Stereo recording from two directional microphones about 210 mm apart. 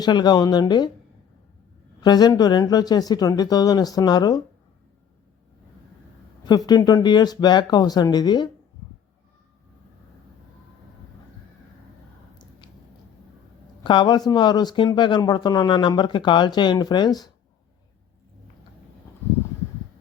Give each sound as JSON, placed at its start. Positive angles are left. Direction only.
{"t": 0.0, "sound": "speech", "side_deg": 20}
{"t": 2.0, "sound": "speech", "side_deg": 20}
{"t": 6.7, "sound": "speech", "side_deg": 15}
{"t": 12.4, "sound": "squish", "side_deg": 20}
{"t": 13.8, "sound": "speech", "side_deg": 20}